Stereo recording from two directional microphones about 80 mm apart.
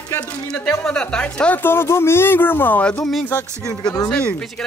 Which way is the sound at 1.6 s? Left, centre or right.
Left.